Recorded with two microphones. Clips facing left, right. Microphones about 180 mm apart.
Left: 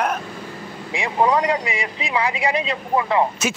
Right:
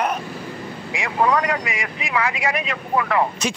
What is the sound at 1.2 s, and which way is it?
Speech, 20° left (ahead or behind).